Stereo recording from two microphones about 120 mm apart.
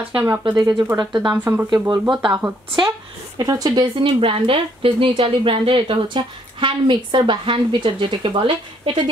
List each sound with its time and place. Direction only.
0.1 s speech: 20° right (ahead or behind)
0.4 s speech: 35° right (ahead or behind)
1.3 s speech: 15° right (ahead or behind)
1.7 s speech: 40° right (ahead or behind)